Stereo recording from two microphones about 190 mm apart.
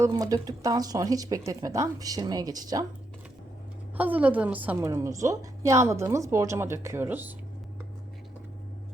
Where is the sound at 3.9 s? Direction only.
10° right (ahead or behind).